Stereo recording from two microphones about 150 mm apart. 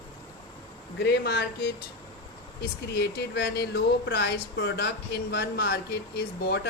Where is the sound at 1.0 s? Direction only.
90° left.